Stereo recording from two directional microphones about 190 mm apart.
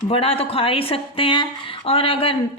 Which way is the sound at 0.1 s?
30° left (ahead or behind).